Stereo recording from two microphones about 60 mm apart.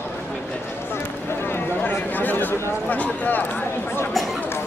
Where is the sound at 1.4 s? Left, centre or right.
Left.